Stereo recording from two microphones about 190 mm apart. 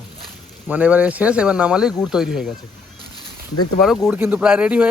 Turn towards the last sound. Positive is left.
turn(degrees=-5)  # may be behind; listen again after turning